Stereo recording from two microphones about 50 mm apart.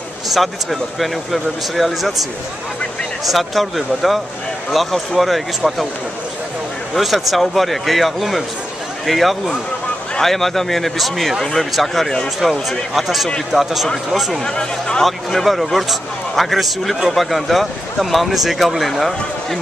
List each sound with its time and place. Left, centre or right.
0.3 s a man's voice: centre
3.3 s a man's voice: centre
7.0 s a man's voice: centre
14.4 s speech: centre
15.0 s a man's voice: centre